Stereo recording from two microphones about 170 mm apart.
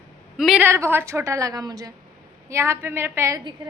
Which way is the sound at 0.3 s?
5° right (ahead or behind).